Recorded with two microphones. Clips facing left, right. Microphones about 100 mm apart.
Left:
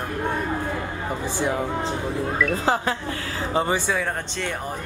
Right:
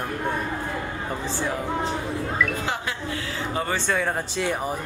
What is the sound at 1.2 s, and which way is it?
Speech, 20° left (ahead or behind).